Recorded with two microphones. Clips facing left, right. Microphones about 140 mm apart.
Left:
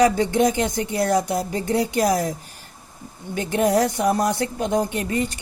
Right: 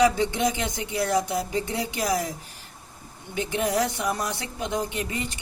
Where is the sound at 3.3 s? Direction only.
45° left (ahead or behind).